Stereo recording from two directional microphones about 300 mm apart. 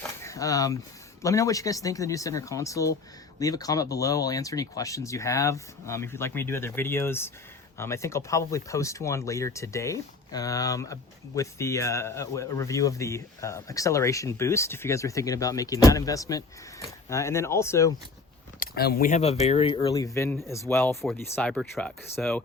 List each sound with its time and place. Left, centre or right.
0.2 s a sound: centre
1.2 s a man's voice: centre
18.6 s a man's voice: left; by 22.4 s centre